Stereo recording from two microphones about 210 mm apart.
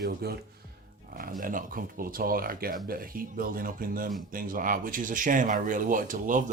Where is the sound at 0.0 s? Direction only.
50° right (ahead or behind).